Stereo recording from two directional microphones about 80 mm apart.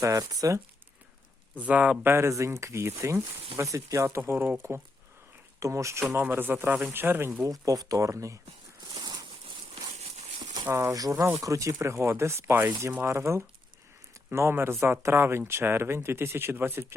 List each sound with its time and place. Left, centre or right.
0.0 s speech: right
1.5 s speech: centre
2.0 s speech: right
4.2 s speech: right
5.5 s speech: right
6.1 s speech: right
7.4 s speech: right
9.0 s a sound: right
10.7 s speech: right
10.9 s speech: right